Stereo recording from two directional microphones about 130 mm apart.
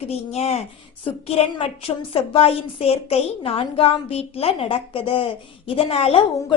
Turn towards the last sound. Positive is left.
turn(degrees=50)  # may be behind; listen again after turning